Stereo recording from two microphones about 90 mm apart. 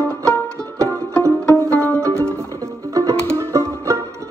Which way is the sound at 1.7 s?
15° left (ahead or behind).